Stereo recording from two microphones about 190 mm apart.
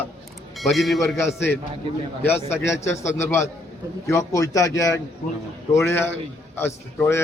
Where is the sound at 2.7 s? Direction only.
15° left (ahead or behind).